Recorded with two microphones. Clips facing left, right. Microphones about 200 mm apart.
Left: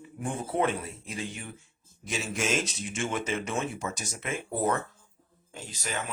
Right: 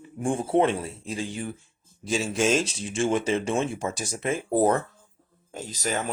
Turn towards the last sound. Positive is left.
turn(degrees=-40)  # may be behind; listen again after turning